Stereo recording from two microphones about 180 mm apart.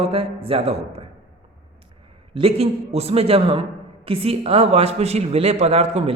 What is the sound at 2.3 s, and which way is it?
Speech, 35° right (ahead or behind).